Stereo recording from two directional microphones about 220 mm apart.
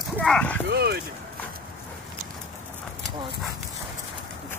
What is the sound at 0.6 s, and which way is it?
Speech, 45° right (ahead or behind).